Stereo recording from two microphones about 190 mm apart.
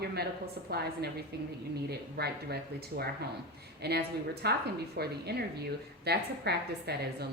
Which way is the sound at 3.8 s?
60° right (ahead or behind).